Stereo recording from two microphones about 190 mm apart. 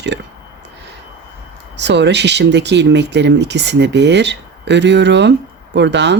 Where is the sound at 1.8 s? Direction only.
65° right (ahead or behind).